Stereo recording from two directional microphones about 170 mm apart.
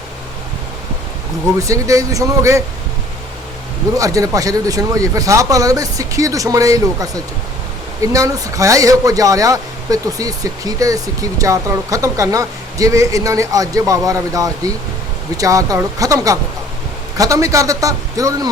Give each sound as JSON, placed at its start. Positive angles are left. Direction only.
{"t": 1.5, "sound": "speech", "side_deg": -20}
{"t": 3.9, "sound": "speech", "side_deg": -20}